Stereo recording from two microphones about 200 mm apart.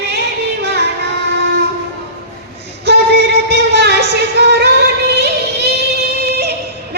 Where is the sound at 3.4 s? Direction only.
55° right (ahead or behind).